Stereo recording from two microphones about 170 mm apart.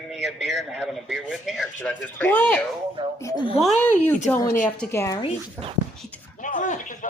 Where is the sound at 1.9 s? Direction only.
10° left (ahead or behind).